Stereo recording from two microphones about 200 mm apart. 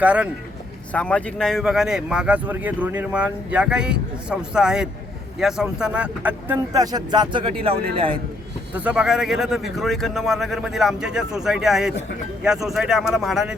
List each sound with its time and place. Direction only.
0.0 s speech: 5° right (ahead or behind)
0.9 s a man's voice: 5° left (ahead or behind); by 8.2 s 25° right (ahead or behind)
8.7 s speech: 5° right (ahead or behind)